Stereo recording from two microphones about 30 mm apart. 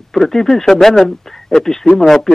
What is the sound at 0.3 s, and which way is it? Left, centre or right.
Speech, centre.